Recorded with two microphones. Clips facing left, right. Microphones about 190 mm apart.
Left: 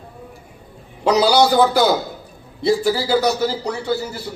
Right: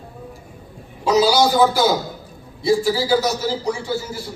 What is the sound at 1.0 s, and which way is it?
Speech, 65° left (ahead or behind).